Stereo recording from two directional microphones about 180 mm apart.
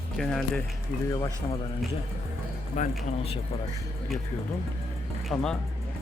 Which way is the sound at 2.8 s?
45° left (ahead or behind).